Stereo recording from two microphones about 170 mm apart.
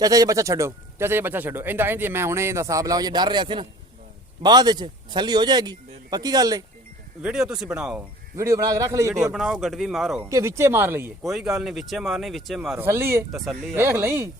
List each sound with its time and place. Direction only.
0.0 s speech: 20° right (ahead or behind)
7.2 s speech: 5° right (ahead or behind)
8.4 s speech: 20° right (ahead or behind)
9.3 s speech: centre (ahead or behind)
10.2 s speech: 15° right (ahead or behind)
11.2 s speech: centre (ahead or behind)
12.7 s speech: 15° right (ahead or behind)
13.3 s speech: centre (ahead or behind)
13.7 s speech: 15° right (ahead or behind)